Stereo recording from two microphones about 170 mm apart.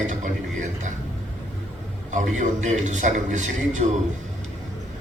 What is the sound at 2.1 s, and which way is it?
A man's voice, 45° right (ahead or behind).